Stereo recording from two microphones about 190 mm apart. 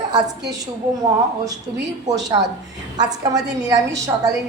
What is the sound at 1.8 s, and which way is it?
Speech, 70° right (ahead or behind).